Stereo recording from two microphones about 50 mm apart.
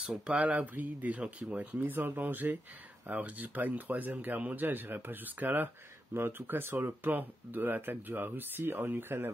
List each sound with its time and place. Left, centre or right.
0.0 s speech: centre
0.4 s speech: right
1.9 s speech: right
6.1 s speech: right